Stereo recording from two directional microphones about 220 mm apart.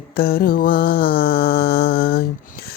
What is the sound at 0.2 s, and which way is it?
Mantra, 45° left (ahead or behind).